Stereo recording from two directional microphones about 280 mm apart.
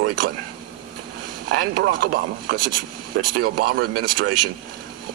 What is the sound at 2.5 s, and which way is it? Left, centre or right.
Speech, right.